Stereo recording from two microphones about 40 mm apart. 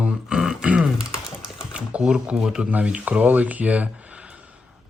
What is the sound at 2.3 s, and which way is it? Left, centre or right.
Speech, centre.